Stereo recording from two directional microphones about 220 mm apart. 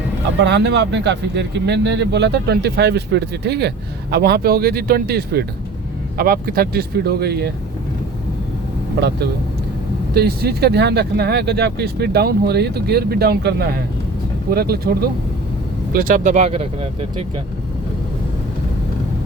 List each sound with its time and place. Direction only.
0.4 s speech: 50° right (ahead or behind)
10.2 s speech: 45° right (ahead or behind); by 17.4 s 25° right (ahead or behind)